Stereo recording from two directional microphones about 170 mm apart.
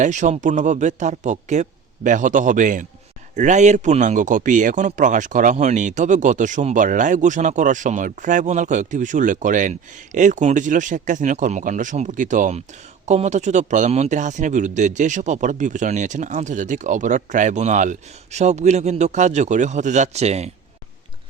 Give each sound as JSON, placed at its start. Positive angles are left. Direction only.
{"t": 0.0, "sound": "speech", "side_deg": -45}